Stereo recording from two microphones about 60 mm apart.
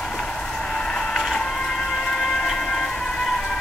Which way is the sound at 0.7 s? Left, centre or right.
Centre.